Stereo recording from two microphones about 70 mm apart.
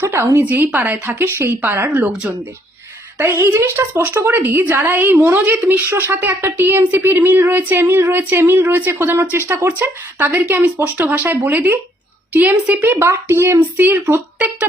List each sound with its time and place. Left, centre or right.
0.0 s a sound: right
0.3 s speech: right
3.2 s a woman's voice: right
13.6 s speech: right